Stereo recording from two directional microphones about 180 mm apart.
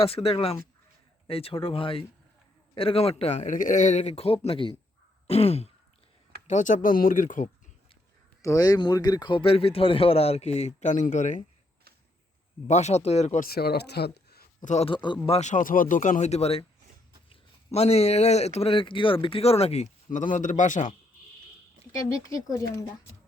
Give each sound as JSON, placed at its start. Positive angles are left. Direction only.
{"t": 0.0, "sound": "speech", "side_deg": 30}
{"t": 6.5, "sound": "speech", "side_deg": 45}
{"t": 8.4, "sound": "speech", "side_deg": 20}
{"t": 12.6, "sound": "speech", "side_deg": 40}
{"t": 13.5, "sound": "speech", "side_deg": 60}
{"t": 14.6, "sound": "speech", "side_deg": 40}
{"t": 15.3, "sound": "speech", "side_deg": 40}
{"t": 22.4, "sound": "speech", "side_deg": 20}